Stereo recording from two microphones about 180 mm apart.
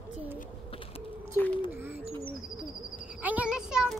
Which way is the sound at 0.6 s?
30° left (ahead or behind).